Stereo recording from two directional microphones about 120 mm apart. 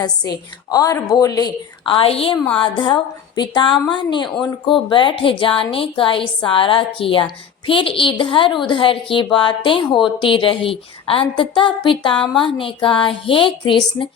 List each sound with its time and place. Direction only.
0.7 s a woman's voice: 30° left (ahead or behind); by 13.7 s 45° left (ahead or behind)